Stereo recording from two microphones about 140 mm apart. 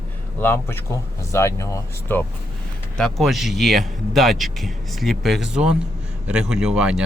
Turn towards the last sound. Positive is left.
turn(degrees=-5)  # may be behind; listen again after turning